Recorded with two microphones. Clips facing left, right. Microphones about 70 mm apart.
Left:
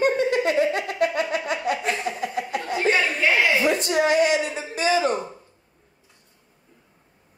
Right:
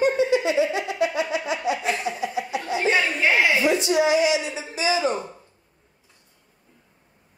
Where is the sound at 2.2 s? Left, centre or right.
Left.